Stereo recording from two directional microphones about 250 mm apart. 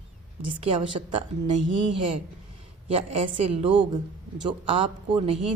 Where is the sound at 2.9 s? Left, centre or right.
Right.